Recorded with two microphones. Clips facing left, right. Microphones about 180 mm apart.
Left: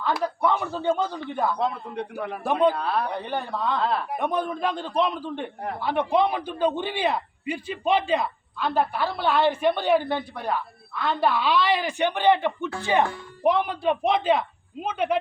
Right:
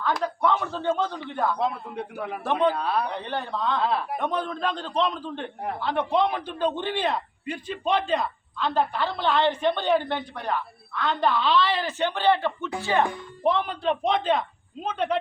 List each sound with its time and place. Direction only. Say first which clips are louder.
0.0 s a man's voice: left 1 dB; 10° left (ahead or behind)
1.5 s speech: left 1 dB; 5° right (ahead or behind)
2.4 s speech: left 2 dB; 10° left (ahead or behind)
4.2 s a man's voice: left 2 dB; 10° left (ahead or behind)